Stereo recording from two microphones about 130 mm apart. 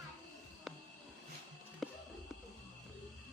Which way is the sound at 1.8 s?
Centre (ahead or behind).